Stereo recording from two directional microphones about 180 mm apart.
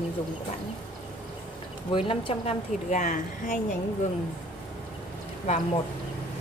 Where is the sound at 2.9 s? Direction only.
45° left (ahead or behind).